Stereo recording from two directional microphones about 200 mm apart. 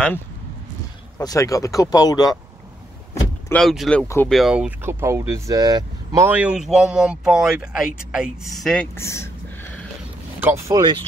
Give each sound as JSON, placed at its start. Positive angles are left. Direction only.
{"t": 1.1, "sound": "speech", "side_deg": 15}
{"t": 3.4, "sound": "speech", "side_deg": 5}
{"t": 10.4, "sound": "speech", "side_deg": -15}